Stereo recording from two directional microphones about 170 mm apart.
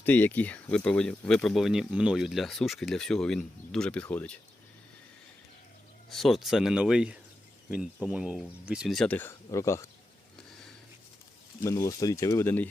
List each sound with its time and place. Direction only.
0.0 s speech: 10° left (ahead or behind)
6.1 s speech: centre (ahead or behind); by 9.9 s 15° left (ahead or behind)
11.6 s speech: 20° left (ahead or behind)